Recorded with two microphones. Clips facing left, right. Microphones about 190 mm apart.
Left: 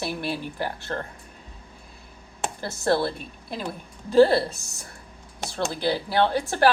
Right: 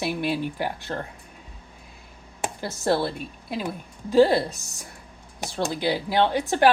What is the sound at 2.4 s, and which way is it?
A woman's voice, 15° right (ahead or behind).